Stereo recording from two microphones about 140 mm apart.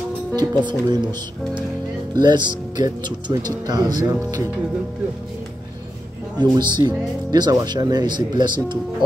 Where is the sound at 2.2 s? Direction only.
30° right (ahead or behind).